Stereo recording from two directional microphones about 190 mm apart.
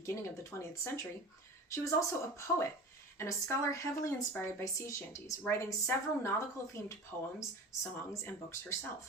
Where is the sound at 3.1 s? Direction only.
15° left (ahead or behind).